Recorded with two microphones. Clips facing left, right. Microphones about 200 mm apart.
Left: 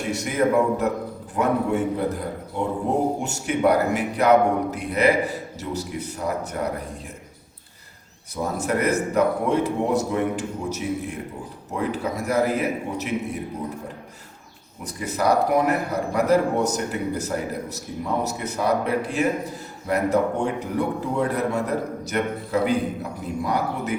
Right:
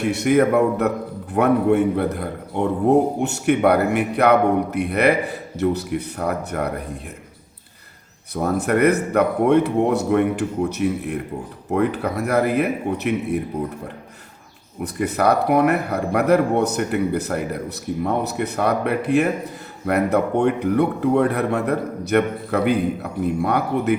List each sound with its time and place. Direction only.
0.1 s a man's voice: 65° right (ahead or behind)
3.2 s a man's voice: 65° right (ahead or behind)
8.4 s a man's voice: 60° right (ahead or behind)
14.9 s a man's voice: 60° right (ahead or behind)